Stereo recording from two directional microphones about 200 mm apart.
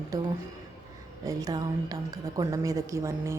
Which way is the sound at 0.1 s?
15° right (ahead or behind).